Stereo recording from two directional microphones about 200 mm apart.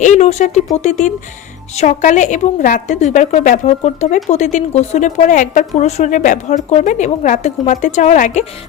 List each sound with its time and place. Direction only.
0.0 s a woman's voice: 35° left (ahead or behind)